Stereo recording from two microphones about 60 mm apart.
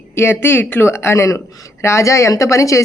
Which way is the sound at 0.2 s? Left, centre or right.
Left.